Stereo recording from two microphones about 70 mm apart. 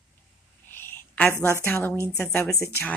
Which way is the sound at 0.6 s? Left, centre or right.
Left.